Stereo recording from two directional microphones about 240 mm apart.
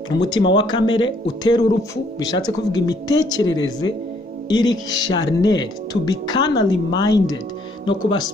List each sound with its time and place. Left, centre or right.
0.1 s speech: centre